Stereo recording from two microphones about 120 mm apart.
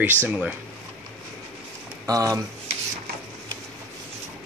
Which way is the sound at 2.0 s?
30° right (ahead or behind).